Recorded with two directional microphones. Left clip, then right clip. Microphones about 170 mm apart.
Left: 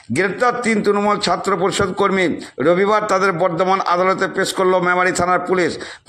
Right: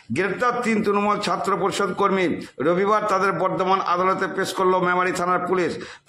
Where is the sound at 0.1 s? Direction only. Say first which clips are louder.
Left 5 dB; 20° left (ahead or behind).